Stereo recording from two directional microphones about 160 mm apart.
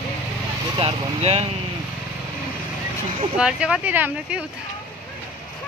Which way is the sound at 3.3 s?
5° right (ahead or behind).